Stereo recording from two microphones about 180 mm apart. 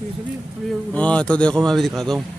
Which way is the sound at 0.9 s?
5° left (ahead or behind).